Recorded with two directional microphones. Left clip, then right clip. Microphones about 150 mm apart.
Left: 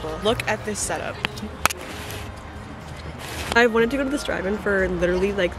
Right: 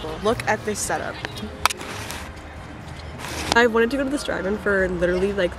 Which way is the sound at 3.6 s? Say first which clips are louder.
Even; 5° right (ahead or behind).